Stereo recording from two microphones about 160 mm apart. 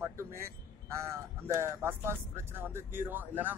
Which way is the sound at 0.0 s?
15° right (ahead or behind).